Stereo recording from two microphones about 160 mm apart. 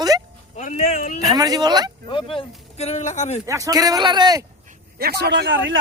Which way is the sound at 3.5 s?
20° right (ahead or behind).